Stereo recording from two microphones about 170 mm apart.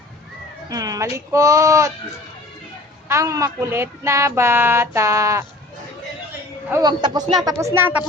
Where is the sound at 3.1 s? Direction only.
20° right (ahead or behind).